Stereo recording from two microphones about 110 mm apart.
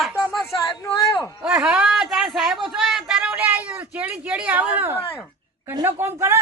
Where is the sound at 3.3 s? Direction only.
15° right (ahead or behind).